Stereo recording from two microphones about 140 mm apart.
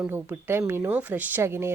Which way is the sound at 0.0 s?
15° right (ahead or behind).